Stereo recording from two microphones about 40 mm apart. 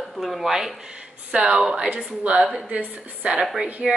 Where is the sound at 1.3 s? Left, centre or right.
Right.